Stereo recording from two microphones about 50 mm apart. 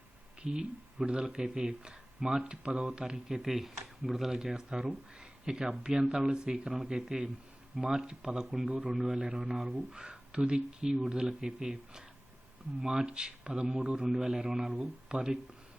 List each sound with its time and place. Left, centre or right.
0.4 s speech: centre